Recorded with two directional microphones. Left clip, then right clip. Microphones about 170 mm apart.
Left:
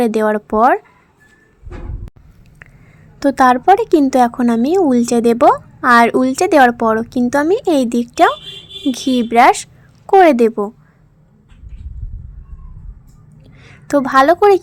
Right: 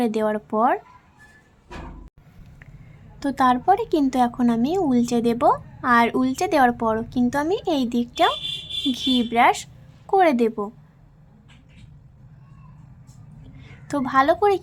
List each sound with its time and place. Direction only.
0.0 s speech: 35° left (ahead or behind)
3.2 s speech: 35° left (ahead or behind)
13.6 s a woman's voice: 35° left (ahead or behind)